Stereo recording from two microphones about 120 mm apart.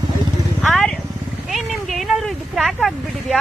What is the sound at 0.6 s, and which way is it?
Speech, 5° left (ahead or behind).